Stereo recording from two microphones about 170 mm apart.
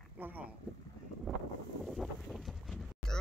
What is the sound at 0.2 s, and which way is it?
Speech, 10° right (ahead or behind).